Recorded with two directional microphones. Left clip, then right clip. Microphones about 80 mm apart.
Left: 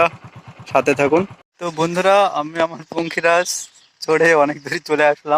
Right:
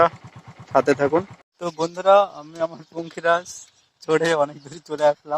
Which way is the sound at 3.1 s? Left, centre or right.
Left.